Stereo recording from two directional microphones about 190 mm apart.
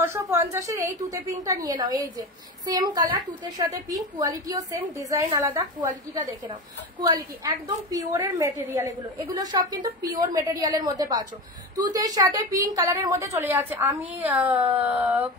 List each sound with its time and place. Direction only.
0.0 s a woman's voice: 15° right (ahead or behind)